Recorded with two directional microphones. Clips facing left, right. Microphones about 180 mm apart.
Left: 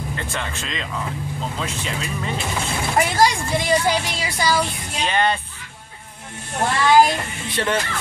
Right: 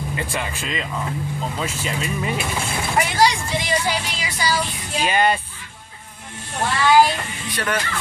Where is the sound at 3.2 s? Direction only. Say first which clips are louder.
Left 1 dB; 50° left (ahead or behind).